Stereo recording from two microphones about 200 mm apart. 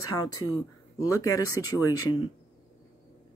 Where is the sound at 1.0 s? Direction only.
15° left (ahead or behind).